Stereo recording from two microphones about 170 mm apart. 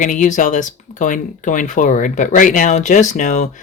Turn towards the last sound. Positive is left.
turn(degrees=45)  # may be behind; listen again after turning